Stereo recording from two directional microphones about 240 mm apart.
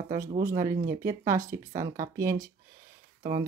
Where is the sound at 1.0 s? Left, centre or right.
Centre.